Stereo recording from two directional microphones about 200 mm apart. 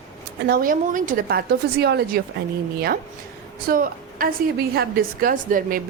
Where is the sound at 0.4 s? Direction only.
45° right (ahead or behind).